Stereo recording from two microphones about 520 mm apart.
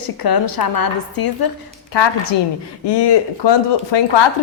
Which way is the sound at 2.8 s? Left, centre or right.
Left.